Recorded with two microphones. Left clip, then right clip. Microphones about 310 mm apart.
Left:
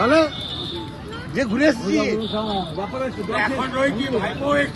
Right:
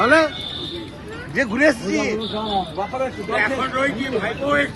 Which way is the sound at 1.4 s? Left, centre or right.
Centre.